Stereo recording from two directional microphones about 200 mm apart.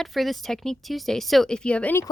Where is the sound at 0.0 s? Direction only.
Centre (ahead or behind).